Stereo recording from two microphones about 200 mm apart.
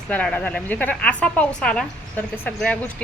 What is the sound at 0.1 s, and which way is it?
A woman's voice, 5° left (ahead or behind).